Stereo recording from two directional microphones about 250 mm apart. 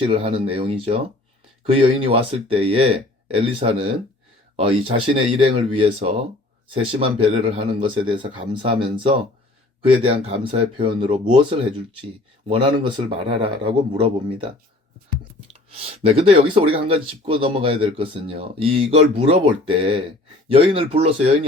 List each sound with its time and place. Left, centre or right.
0.1 s speech: right
15.4 s speech: right